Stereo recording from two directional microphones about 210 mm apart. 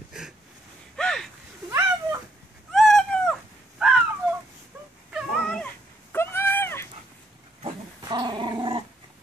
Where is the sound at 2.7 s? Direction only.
Centre (ahead or behind).